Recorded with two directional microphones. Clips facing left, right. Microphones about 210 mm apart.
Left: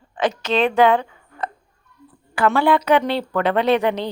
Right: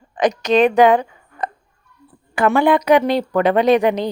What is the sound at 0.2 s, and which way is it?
A woman's voice, 15° right (ahead or behind).